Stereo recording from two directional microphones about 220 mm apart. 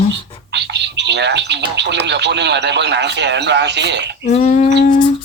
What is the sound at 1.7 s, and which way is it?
Speech, 50° right (ahead or behind).